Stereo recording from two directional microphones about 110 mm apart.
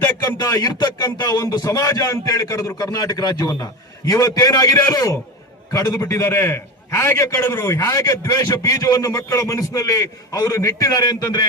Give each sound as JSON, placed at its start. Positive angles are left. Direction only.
{"t": 0.2, "sound": "a man's voice", "side_deg": 30}